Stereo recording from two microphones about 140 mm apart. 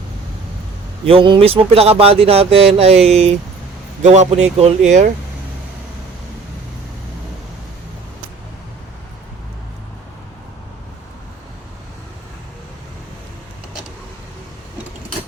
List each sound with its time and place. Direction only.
1.0 s speech: 40° right (ahead or behind); by 5.1 s 60° right (ahead or behind)